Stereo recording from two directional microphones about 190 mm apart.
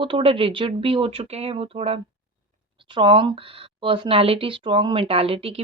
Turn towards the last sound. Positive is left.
turn(degrees=-30)  # may be behind; listen again after turning